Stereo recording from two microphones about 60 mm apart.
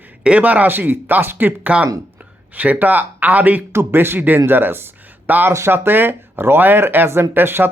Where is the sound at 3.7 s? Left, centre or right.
Right.